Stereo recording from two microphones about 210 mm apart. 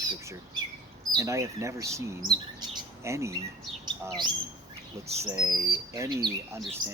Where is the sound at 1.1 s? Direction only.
15° right (ahead or behind).